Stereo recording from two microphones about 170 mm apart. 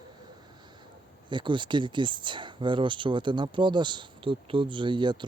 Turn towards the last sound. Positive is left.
turn(degrees=-25)  # may be behind; listen again after turning